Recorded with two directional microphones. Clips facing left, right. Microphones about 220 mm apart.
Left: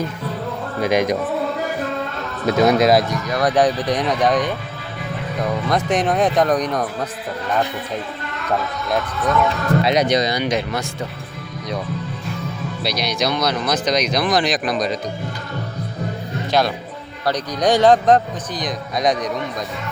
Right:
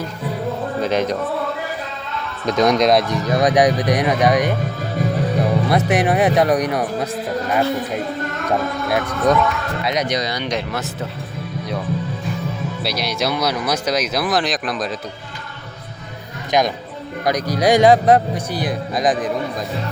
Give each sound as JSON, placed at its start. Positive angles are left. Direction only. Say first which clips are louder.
{"t": 0.8, "sound": "speech", "louder": "left 3 dB", "side_deg": 10}
{"t": 2.6, "sound": "speech", "louder": "even", "side_deg": 5}
{"t": 3.3, "sound": "speech", "louder": "right 2 dB", "side_deg": -15}
{"t": 8.9, "sound": "speech", "louder": "even", "side_deg": -60}
{"t": 9.5, "sound": "speech", "louder": "left 5 dB", "side_deg": 35}
{"t": 10.3, "sound": "speech", "louder": "left 3 dB", "side_deg": 5}
{"t": 12.8, "sound": "speech", "louder": "left 1 dB", "side_deg": -5}
{"t": 16.5, "sound": "speech", "louder": "right 1 dB", "side_deg": -15}